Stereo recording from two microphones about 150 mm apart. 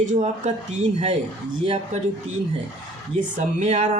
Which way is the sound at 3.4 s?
55° right (ahead or behind).